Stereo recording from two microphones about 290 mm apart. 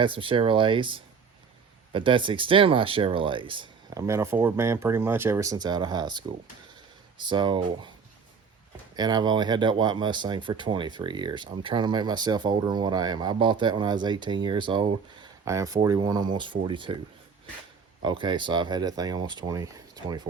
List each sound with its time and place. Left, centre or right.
0.0 s speech: centre
9.0 s speech: centre
18.0 s speech: centre